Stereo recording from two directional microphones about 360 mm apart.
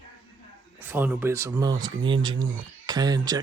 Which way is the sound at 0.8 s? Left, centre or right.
Centre.